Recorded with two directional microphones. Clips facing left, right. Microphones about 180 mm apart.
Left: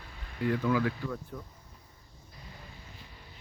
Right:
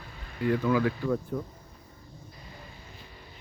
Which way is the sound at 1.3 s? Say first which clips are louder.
Right 10 dB; 45° right (ahead or behind).